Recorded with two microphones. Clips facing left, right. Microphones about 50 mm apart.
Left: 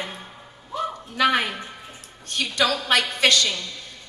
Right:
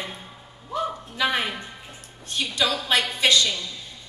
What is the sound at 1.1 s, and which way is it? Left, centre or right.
A woman's voice, left.